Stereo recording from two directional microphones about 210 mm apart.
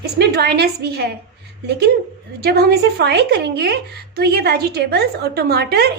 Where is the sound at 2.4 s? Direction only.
50° right (ahead or behind).